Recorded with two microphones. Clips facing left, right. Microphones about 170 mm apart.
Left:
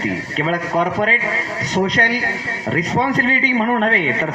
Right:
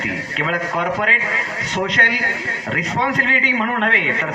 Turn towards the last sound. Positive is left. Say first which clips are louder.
# left 3 dB
turn(degrees=35)  # may be behind; listen again after turning